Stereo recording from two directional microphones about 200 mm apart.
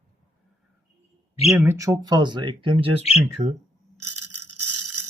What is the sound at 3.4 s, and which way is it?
Speech, 35° right (ahead or behind).